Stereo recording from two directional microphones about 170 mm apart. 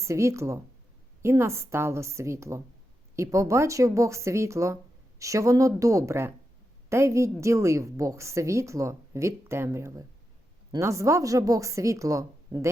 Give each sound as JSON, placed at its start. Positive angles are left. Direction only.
{"t": 0.0, "sound": "speech", "side_deg": -15}